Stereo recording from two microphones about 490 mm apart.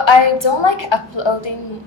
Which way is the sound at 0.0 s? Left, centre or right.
Left.